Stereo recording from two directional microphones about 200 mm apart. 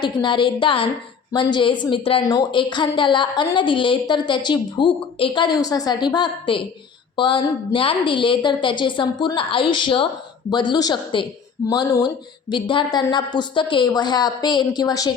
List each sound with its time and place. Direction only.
0.0 s a woman's voice: 25° left (ahead or behind)